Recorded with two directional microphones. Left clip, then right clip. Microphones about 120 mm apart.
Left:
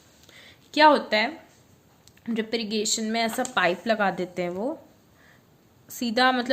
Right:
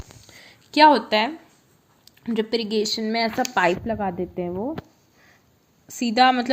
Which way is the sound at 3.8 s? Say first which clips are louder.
Left 2 dB; 20° right (ahead or behind).